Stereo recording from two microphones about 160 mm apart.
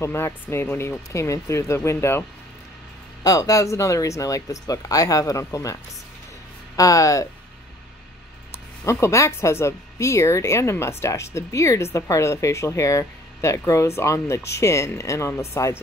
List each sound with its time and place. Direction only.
0.0 s speech: 15° left (ahead or behind)
3.3 s speech: 20° left (ahead or behind)
6.8 s speech: 20° left (ahead or behind)
8.8 s speech: 20° left (ahead or behind)